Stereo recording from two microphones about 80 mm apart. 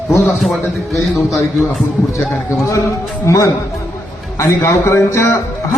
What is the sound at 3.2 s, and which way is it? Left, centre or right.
A man's voice, left.